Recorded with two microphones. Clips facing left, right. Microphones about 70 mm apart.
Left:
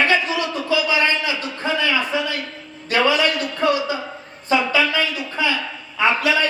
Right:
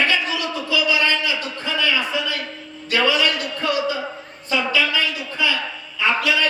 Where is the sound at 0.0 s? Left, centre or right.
Left.